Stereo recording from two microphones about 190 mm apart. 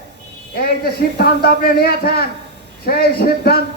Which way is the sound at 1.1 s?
50° left (ahead or behind).